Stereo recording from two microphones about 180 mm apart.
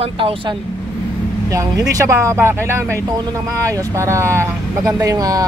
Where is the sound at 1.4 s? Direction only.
20° right (ahead or behind).